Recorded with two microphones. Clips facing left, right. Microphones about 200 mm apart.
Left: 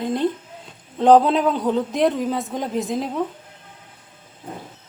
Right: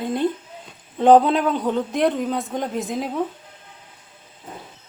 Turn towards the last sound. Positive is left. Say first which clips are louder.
# left 2 dB
turn(degrees=0)  # may be behind; listen again after turning